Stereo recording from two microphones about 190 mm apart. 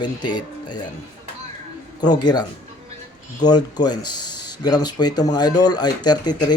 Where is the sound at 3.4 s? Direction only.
20° left (ahead or behind).